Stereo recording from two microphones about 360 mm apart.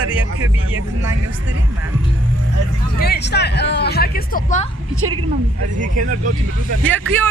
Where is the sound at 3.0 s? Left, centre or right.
Left.